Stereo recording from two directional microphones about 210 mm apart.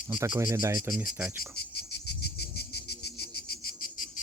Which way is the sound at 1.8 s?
50° left (ahead or behind).